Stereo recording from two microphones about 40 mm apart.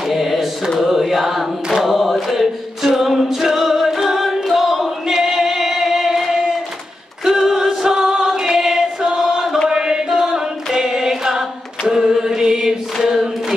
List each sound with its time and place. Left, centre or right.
0.1 s mantra: centre
0.7 s chant: centre
7.2 s choir: centre
9.7 s chant: centre
10.0 s choir: centre
11.9 s chant: centre
13.0 s choir: centre